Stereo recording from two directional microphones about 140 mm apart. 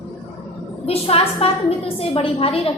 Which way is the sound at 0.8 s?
45° left (ahead or behind).